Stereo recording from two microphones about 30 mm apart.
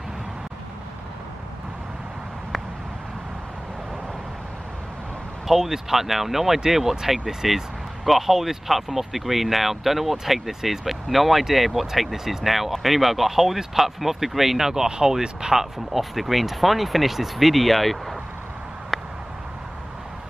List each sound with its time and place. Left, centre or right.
5.5 s speech: centre
14.9 s speech: right
15.5 s speech: centre
18.9 s a sound: centre